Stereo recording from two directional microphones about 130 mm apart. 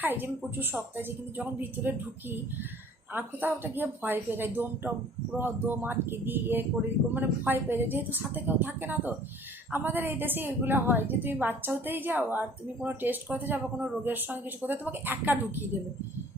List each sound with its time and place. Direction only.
0.0 s a woman's voice: 15° right (ahead or behind)